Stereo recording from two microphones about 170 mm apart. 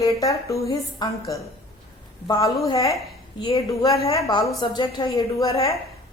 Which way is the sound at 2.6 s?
20° left (ahead or behind).